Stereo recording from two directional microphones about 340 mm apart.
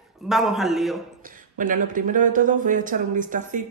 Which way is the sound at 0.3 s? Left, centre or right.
Centre.